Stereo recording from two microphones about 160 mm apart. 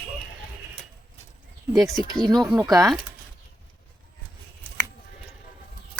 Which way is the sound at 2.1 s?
25° right (ahead or behind).